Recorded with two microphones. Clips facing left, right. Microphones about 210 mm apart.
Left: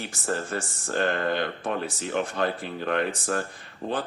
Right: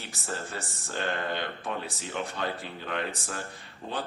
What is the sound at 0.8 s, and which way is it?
Speech, 50° left (ahead or behind).